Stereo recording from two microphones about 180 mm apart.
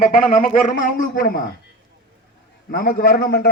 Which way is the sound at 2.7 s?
55° left (ahead or behind).